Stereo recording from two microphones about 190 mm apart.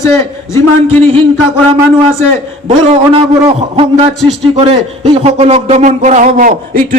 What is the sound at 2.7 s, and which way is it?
A man's voice, 30° right (ahead or behind).